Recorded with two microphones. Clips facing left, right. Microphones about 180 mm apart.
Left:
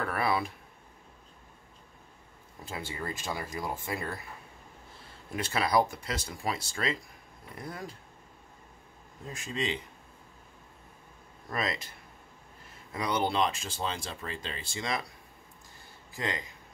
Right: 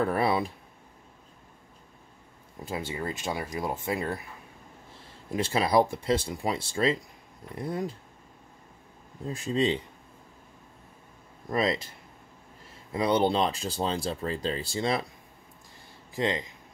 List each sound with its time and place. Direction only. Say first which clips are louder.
0.0 s speech: right 5 dB; 25° right (ahead or behind)
2.7 s speech: right 5 dB; 20° right (ahead or behind)
5.3 s speech: right 4 dB; 25° right (ahead or behind)
9.3 s speech: right 8 dB; 30° right (ahead or behind)
11.5 s speech: right 7 dB; 25° right (ahead or behind)
12.9 s speech: right 6 dB; 30° right (ahead or behind)
16.2 s speech: right 7 dB; 25° right (ahead or behind)